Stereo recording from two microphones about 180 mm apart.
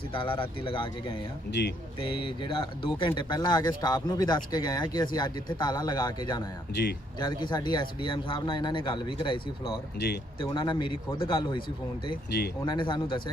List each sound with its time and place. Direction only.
0.1 s speech: 30° left (ahead or behind)
1.6 s speech: 70° left (ahead or behind)
2.0 s speech: 30° left (ahead or behind)
6.8 s speech: 70° left (ahead or behind)
7.2 s speech: 25° left (ahead or behind)
10.0 s speech: 70° left (ahead or behind)
10.4 s speech: 25° left (ahead or behind)
12.6 s speech: 25° left (ahead or behind)